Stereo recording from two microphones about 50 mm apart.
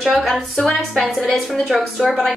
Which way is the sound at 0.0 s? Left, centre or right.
Centre.